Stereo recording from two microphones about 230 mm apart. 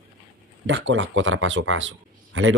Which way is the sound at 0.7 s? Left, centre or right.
Right.